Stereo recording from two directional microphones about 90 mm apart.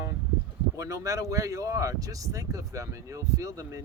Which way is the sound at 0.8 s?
40° right (ahead or behind).